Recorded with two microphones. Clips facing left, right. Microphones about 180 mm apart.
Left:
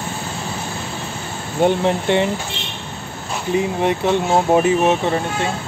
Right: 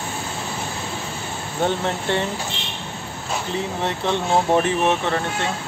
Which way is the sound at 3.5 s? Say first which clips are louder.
Left 9 dB; 15° left (ahead or behind).